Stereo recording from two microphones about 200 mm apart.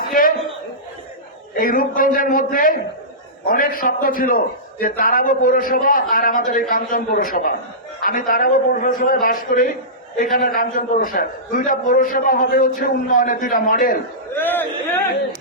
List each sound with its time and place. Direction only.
0.1 s chuckle: 45° left (ahead or behind)
1.5 s a man's voice: 45° left (ahead or behind)
14.3 s a man's voice: 10° left (ahead or behind)